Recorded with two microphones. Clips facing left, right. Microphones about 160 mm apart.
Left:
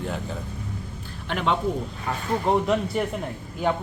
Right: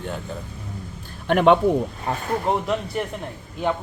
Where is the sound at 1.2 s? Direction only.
55° right (ahead or behind).